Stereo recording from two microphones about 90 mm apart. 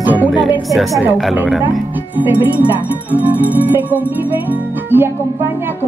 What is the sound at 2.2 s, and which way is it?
Music, 20° right (ahead or behind).